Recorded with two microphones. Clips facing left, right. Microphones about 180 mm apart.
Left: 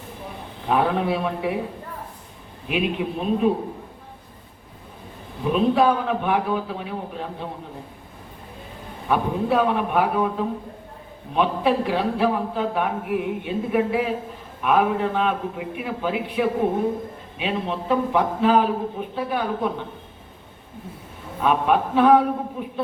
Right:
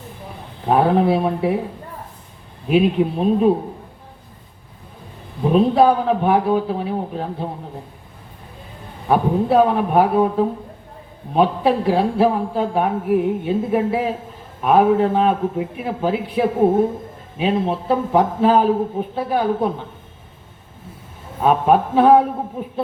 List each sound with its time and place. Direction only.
0.7 s a man's voice: 35° right (ahead or behind)
2.6 s a man's voice: 35° right (ahead or behind)
5.5 s a man's voice: 35° right (ahead or behind)
9.0 s a man's voice: 35° right (ahead or behind)
21.4 s a man's voice: 30° right (ahead or behind)